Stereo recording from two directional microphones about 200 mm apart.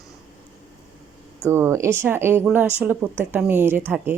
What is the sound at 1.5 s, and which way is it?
Speech, 10° right (ahead or behind).